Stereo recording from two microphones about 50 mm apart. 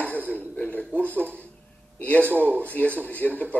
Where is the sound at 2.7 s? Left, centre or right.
Left.